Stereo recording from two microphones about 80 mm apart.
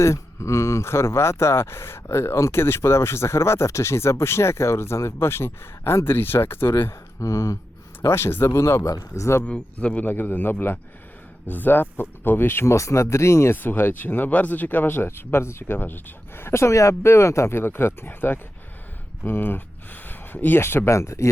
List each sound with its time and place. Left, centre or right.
0.0 s speech: left
8.0 s speech: left
9.4 s speech: centre; by 21.2 s left